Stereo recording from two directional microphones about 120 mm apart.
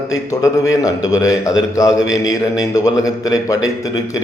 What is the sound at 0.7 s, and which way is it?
A man's voice, 30° left (ahead or behind).